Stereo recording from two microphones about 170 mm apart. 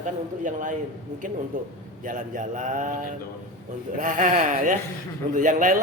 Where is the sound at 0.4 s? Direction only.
50° right (ahead or behind).